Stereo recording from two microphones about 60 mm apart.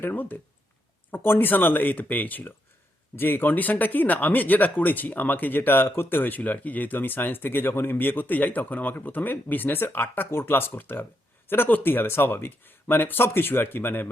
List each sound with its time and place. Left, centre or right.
0.0 s speech: left